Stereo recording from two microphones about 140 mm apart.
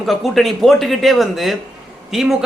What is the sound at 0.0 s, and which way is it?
Speech, centre (ahead or behind).